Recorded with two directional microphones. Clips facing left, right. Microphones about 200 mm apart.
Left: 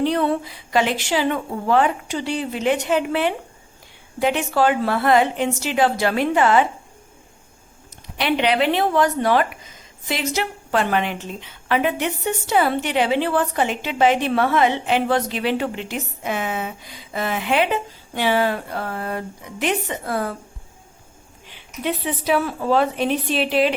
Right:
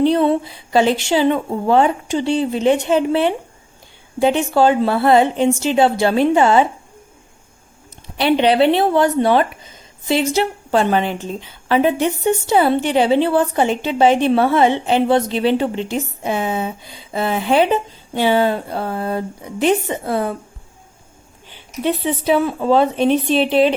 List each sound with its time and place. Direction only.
0.0 s speech: 25° right (ahead or behind)
8.2 s speech: 30° right (ahead or behind)
21.8 s speech: 25° right (ahead or behind)